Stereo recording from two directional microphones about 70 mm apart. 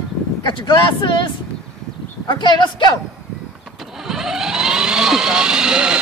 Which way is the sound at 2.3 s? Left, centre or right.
Left.